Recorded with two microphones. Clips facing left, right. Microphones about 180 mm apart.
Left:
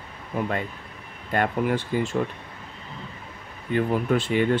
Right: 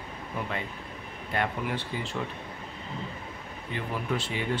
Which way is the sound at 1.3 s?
50° left (ahead or behind).